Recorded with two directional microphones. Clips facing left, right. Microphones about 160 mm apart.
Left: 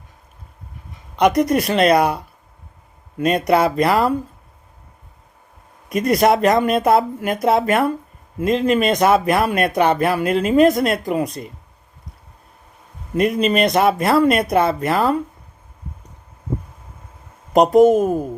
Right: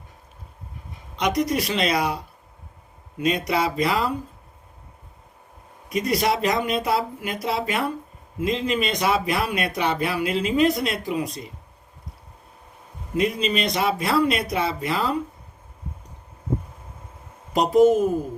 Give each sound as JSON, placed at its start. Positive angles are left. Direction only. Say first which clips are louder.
{"t": 1.1, "sound": "speech", "louder": "left 7 dB", "side_deg": 55}
{"t": 5.9, "sound": "speech", "louder": "left 7 dB", "side_deg": 55}
{"t": 13.1, "sound": "speech", "louder": "left 6 dB", "side_deg": 55}
{"t": 17.5, "sound": "speech", "louder": "left 5 dB", "side_deg": 50}